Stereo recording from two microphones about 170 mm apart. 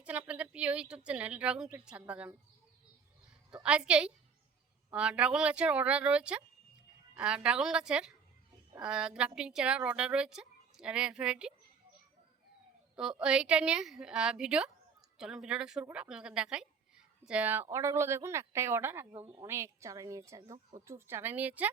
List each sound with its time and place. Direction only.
0.0 s a woman's voice: 10° right (ahead or behind)
3.5 s a woman's voice: 5° right (ahead or behind)
13.0 s a woman's voice: 5° right (ahead or behind)